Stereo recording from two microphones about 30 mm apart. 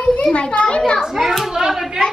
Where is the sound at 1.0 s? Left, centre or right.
Centre.